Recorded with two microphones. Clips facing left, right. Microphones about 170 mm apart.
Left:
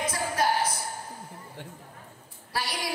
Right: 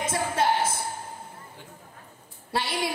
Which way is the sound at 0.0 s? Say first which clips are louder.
Right 2 dB; 25° right (ahead or behind).